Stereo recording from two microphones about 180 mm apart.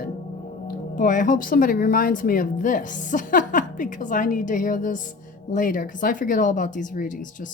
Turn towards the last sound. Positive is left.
turn(degrees=45)  # may be behind; listen again after turning